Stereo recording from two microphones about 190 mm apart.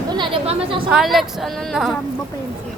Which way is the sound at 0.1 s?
25° right (ahead or behind).